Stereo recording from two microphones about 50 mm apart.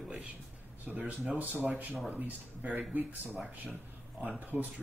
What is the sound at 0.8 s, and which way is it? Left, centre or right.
Speech, right.